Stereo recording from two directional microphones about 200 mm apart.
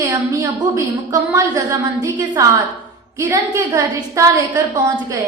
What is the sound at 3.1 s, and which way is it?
A woman's voice, 15° right (ahead or behind).